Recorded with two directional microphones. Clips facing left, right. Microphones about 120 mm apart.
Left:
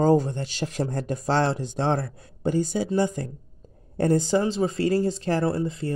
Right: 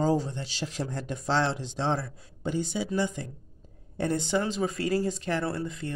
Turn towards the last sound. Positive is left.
turn(degrees=35)  # may be behind; listen again after turning